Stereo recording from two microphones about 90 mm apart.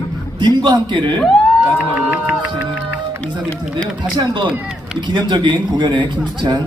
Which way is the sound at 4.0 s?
60° right (ahead or behind).